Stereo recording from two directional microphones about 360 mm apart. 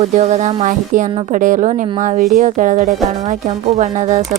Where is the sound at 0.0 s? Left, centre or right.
Centre.